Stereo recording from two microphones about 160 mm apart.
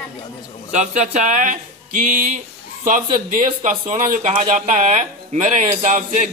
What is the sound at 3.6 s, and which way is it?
Speech, 50° right (ahead or behind).